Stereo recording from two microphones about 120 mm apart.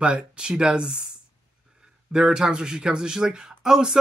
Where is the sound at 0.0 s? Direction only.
10° right (ahead or behind).